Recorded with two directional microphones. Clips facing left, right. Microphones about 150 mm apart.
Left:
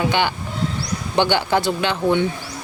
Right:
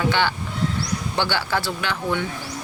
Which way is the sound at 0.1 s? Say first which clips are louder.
Left 2 dB; 15° left (ahead or behind).